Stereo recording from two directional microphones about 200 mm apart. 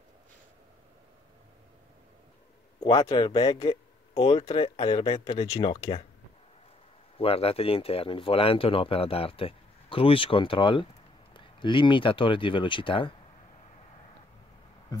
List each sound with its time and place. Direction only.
2.8 s speech: 20° left (ahead or behind)
7.2 s speech: 30° left (ahead or behind)
14.9 s a sound: 20° left (ahead or behind)